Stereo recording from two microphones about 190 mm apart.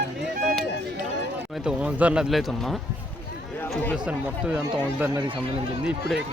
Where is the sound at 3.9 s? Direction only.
5° right (ahead or behind).